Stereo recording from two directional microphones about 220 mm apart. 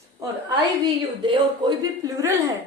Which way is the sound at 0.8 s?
20° right (ahead or behind).